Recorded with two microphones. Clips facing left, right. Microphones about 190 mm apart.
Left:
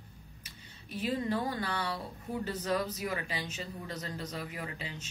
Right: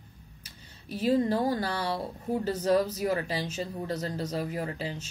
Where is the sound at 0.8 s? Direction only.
40° right (ahead or behind).